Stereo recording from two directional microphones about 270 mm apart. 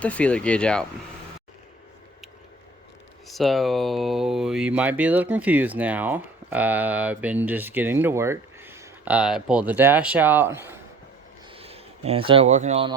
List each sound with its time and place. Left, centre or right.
0.0 s speech: centre
3.2 s speech: centre
11.5 s speech: right